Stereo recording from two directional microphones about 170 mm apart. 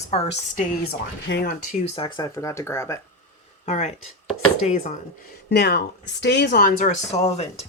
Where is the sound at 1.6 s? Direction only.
40° left (ahead or behind).